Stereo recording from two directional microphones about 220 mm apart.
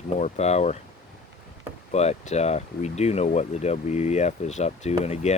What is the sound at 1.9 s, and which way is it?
Speech, 30° left (ahead or behind).